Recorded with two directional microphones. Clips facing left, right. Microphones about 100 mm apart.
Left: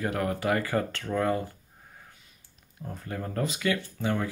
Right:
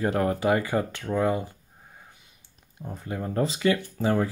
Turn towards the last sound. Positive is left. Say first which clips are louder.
# right 5 dB
turn(degrees=-35)  # may be behind; listen again after turning